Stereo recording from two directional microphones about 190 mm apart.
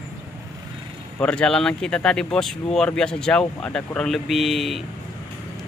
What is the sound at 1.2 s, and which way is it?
Speech, 5° left (ahead or behind).